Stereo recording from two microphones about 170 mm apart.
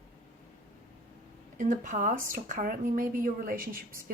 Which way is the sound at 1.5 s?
50° right (ahead or behind).